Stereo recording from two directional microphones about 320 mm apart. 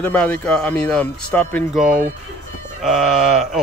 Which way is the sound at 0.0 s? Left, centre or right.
Centre.